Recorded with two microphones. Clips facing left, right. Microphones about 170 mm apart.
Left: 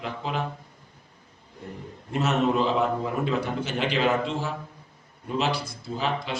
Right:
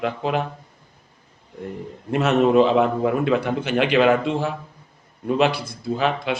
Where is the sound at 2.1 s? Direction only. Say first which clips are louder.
Right 6 dB; 65° right (ahead or behind).